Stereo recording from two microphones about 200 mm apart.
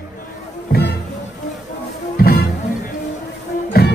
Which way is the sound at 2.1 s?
50° left (ahead or behind).